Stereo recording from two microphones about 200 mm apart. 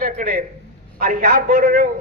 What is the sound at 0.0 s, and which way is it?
A man's voice, 45° right (ahead or behind).